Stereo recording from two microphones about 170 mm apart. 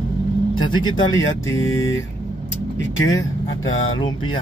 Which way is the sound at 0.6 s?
25° left (ahead or behind).